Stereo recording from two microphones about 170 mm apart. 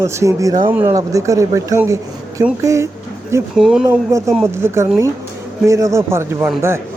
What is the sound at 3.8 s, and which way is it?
Speech, 15° right (ahead or behind).